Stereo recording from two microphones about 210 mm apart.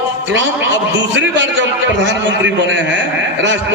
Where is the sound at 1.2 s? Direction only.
60° right (ahead or behind).